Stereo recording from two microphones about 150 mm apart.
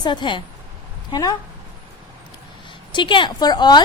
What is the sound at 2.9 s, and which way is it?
Speech, 30° left (ahead or behind).